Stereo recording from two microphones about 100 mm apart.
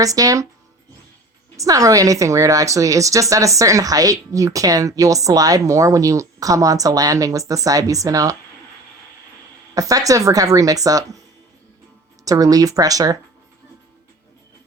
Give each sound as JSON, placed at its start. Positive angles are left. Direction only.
{"t": 0.0, "sound": "a woman's voice", "side_deg": -35}
{"t": 1.5, "sound": "a woman's voice", "side_deg": -35}
{"t": 9.7, "sound": "a woman's voice", "side_deg": -35}
{"t": 12.2, "sound": "a woman's voice", "side_deg": -35}